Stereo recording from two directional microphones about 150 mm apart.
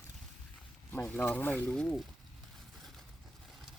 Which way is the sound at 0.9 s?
10° left (ahead or behind).